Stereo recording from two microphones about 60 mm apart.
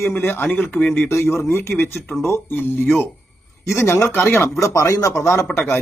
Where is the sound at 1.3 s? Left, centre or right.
Left.